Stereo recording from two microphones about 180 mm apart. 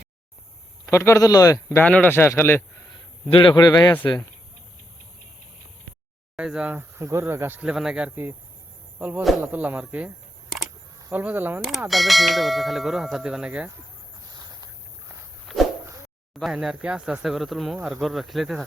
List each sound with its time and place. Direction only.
0.9 s a man's voice: 15° left (ahead or behind)
1.8 s a man's voice: 5° left (ahead or behind)
2.9 s a man's voice: 25° left (ahead or behind)
6.3 s speech: 5° right (ahead or behind)
11.1 s speech: 10° right (ahead or behind)
15.4 s a sound: centre (ahead or behind)
16.4 s speech: 5° right (ahead or behind)